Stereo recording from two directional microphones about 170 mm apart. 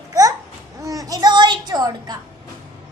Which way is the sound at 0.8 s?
20° right (ahead or behind).